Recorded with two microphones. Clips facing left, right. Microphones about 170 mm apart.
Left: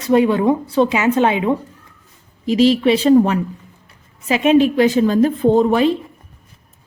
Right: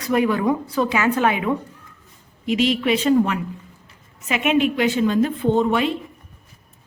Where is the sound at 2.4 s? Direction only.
35° left (ahead or behind).